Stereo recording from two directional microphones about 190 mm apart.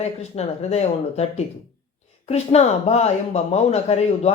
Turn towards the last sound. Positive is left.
turn(degrees=35)  # may be behind; listen again after turning